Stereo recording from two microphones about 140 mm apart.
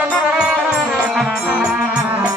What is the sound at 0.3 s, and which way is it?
Music, 5° right (ahead or behind).